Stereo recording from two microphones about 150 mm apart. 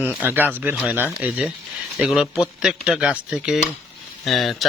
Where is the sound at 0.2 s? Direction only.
10° right (ahead or behind).